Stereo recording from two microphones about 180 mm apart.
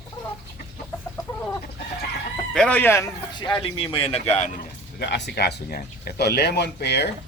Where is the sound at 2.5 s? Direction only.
5° left (ahead or behind); by 4.5 s 35° left (ahead or behind).